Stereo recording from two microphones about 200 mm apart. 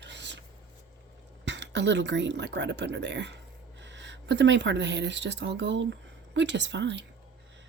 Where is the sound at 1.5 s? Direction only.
60° right (ahead or behind).